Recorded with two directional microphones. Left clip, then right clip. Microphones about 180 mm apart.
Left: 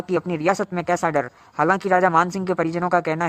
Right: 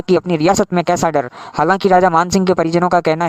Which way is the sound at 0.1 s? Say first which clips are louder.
Right 8 dB; 45° right (ahead or behind).